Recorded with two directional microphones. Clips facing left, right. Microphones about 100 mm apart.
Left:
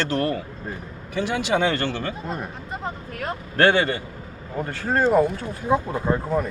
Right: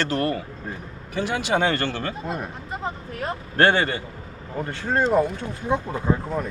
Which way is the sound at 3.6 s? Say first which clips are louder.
Left 1 dB; 35° right (ahead or behind).